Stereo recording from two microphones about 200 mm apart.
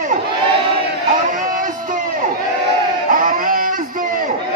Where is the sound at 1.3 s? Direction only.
40° right (ahead or behind).